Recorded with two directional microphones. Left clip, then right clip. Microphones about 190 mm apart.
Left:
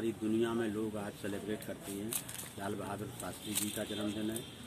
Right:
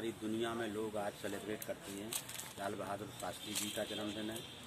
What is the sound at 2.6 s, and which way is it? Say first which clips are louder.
Speech: left 1 dB; centre (ahead or behind).